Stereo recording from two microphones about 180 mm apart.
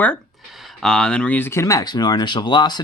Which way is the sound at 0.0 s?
5° left (ahead or behind).